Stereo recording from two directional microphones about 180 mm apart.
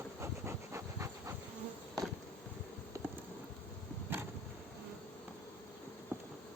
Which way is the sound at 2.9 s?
15° right (ahead or behind).